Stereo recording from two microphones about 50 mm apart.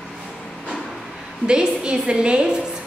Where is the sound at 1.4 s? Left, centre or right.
Centre.